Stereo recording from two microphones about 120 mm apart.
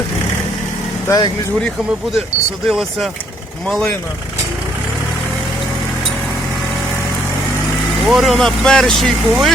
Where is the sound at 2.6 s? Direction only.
Centre (ahead or behind).